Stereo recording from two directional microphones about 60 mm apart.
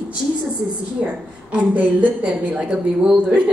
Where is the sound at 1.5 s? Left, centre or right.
Right.